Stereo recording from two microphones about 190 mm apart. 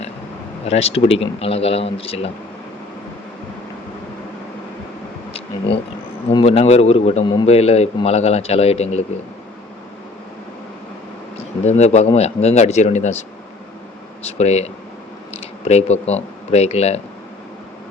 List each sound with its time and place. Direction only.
0.6 s speech: 35° left (ahead or behind)
6.2 s speech: 30° left (ahead or behind)
11.3 s speech: 35° left (ahead or behind)
14.3 s speech: 35° left (ahead or behind)